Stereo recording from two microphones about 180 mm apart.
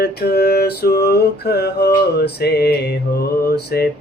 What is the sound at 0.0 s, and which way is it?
Mantra, 60° left (ahead or behind).